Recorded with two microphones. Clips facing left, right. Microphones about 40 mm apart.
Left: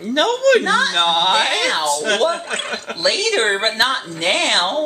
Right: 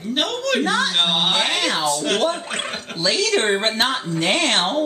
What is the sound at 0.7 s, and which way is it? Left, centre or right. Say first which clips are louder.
Speech: left 3 dB; centre.